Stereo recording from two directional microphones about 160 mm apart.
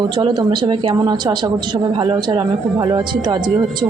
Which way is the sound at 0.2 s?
30° right (ahead or behind).